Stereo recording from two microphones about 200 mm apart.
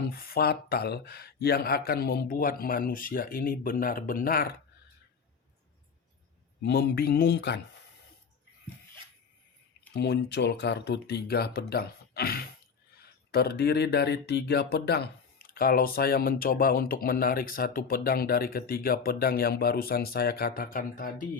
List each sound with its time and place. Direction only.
0.1 s speech: 50° left (ahead or behind)
6.6 s speech: 55° left (ahead or behind)
9.9 s speech: 55° left (ahead or behind)